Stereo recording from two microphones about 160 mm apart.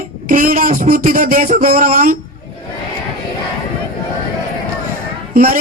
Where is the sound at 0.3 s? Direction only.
60° right (ahead or behind).